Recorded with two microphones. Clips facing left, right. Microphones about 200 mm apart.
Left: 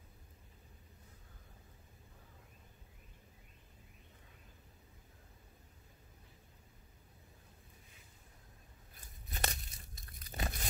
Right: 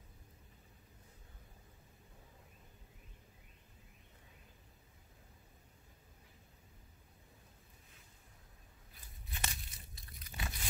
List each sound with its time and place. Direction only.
9.3 s tearing: 45° left (ahead or behind)